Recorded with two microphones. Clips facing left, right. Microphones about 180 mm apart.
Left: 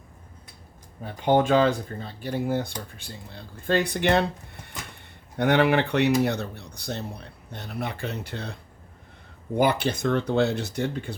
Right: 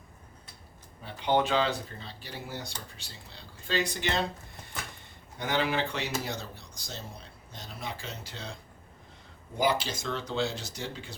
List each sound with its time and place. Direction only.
1.0 s a man's voice: 45° left (ahead or behind)
9.6 s a man's voice: 60° left (ahead or behind)